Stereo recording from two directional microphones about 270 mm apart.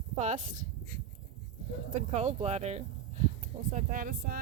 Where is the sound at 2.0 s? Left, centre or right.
Right.